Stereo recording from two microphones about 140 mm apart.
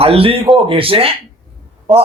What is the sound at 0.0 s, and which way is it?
Speech, 45° right (ahead or behind).